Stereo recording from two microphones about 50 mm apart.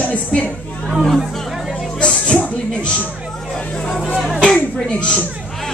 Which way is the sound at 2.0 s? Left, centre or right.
Left.